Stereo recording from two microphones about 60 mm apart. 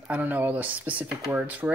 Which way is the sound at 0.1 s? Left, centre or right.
Right.